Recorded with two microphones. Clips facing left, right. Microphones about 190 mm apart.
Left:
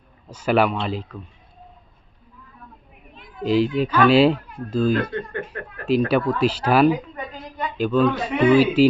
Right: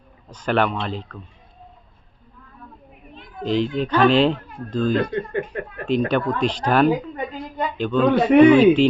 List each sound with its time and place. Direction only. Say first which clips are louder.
0.3 s speech: left 2 dB; 10° left (ahead or behind)
3.4 s speech: left 2 dB; 5° left (ahead or behind)
5.1 s speech: right 4 dB; 20° right (ahead or behind)
6.1 s speech: left 1 dB; 5° left (ahead or behind)
8.1 s a man's voice: right 9 dB; 65° right (ahead or behind)
8.4 s speech: right 2 dB; 5° left (ahead or behind)